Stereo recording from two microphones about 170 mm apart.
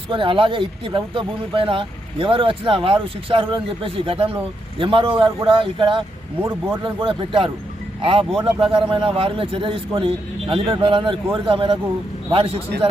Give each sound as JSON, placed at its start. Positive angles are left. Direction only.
{"t": 0.1, "sound": "speech", "side_deg": -30}
{"t": 6.4, "sound": "speech", "side_deg": -15}
{"t": 6.8, "sound": "speech", "side_deg": -30}